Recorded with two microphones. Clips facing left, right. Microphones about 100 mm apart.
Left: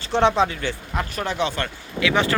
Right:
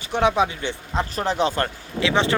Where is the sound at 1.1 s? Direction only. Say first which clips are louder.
Right 3 dB; 35° right (ahead or behind).